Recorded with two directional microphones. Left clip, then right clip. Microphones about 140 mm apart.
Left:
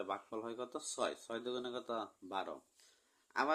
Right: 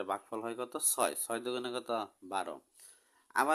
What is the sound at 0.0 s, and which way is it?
Speech, 45° right (ahead or behind).